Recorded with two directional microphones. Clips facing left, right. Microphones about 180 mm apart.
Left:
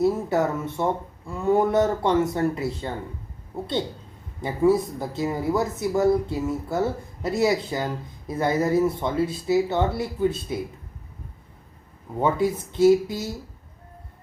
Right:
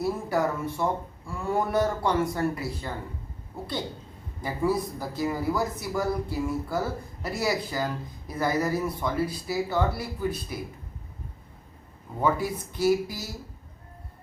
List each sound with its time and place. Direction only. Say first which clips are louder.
0.0 s speech: left 5 dB; 20° left (ahead or behind)
4.4 s speech: left 6 dB; 25° left (ahead or behind)
12.2 s speech: left 4 dB; 25° left (ahead or behind)